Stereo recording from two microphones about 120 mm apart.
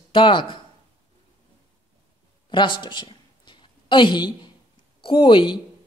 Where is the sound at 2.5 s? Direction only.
40° left (ahead or behind).